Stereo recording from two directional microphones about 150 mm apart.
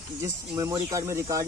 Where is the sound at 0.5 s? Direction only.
20° right (ahead or behind).